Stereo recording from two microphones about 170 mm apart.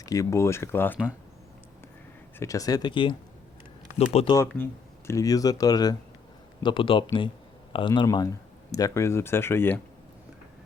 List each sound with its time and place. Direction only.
0.0 s speech: 20° left (ahead or behind)
2.4 s speech: 20° left (ahead or behind); by 4.4 s 35° left (ahead or behind)
4.4 s speech: 15° left (ahead or behind)